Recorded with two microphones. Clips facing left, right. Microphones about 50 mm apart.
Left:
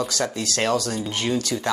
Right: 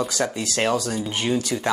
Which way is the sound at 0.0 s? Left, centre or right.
Centre.